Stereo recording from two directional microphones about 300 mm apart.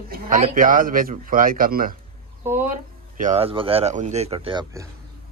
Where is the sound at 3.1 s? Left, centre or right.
Right.